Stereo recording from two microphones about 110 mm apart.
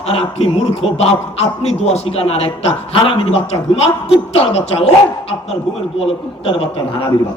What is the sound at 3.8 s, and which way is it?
A man's voice, 65° left (ahead or behind).